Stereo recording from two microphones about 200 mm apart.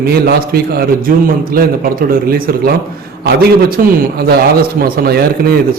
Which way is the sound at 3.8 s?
45° right (ahead or behind).